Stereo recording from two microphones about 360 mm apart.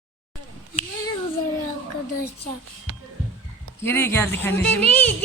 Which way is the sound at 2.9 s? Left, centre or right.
Right.